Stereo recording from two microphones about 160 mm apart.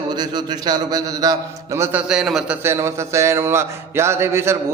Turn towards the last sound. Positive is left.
turn(degrees=-15)  # may be behind; listen again after turning